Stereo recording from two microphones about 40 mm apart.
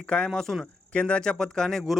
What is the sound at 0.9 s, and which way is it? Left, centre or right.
Speech, left.